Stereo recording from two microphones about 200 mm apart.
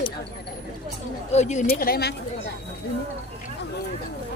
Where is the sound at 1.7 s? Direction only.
50° left (ahead or behind).